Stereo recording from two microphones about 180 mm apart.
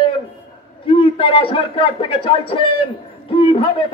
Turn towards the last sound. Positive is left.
turn(degrees=30)  # may be behind; listen again after turning